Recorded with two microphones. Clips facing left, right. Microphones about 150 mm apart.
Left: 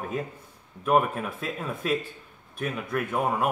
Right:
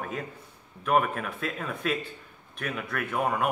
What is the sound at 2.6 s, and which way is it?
Speech, 35° left (ahead or behind).